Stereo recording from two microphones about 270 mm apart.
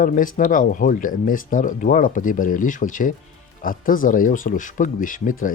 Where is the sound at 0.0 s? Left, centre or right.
Left.